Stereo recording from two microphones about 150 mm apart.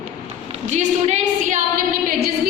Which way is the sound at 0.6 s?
50° right (ahead or behind).